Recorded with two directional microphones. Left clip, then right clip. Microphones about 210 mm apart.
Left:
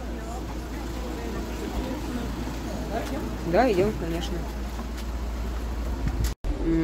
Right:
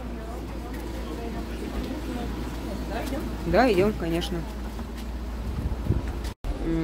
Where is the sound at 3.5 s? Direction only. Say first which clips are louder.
Right 1 dB; 20° right (ahead or behind).